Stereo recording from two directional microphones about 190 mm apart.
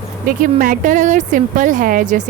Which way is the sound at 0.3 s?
45° right (ahead or behind).